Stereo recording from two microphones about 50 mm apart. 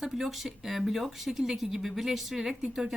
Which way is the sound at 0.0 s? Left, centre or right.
Centre.